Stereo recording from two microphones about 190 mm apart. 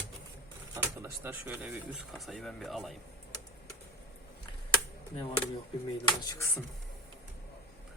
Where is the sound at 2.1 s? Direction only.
Centre (ahead or behind).